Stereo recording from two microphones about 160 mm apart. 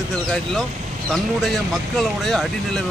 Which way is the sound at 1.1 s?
Centre (ahead or behind).